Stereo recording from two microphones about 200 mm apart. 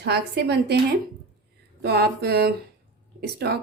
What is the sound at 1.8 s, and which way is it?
A woman's voice, 55° right (ahead or behind).